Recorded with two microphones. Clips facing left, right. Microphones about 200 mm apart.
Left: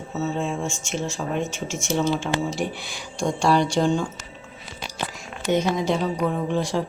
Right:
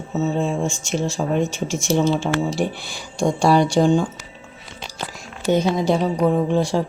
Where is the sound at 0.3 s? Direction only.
35° right (ahead or behind).